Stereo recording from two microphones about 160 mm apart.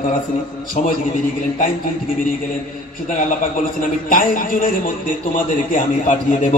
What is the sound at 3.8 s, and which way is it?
A man's voice, 55° left (ahead or behind).